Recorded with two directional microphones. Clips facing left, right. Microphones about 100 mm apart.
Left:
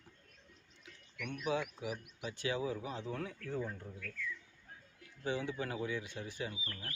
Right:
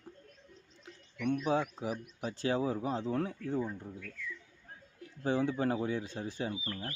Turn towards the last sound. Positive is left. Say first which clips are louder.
# right 6 dB
turn(degrees=-35)  # may be behind; listen again after turning